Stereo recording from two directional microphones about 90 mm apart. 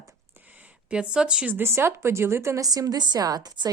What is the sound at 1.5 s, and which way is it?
Speech, 30° right (ahead or behind).